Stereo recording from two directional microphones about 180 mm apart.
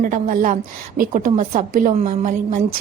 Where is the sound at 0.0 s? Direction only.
45° right (ahead or behind).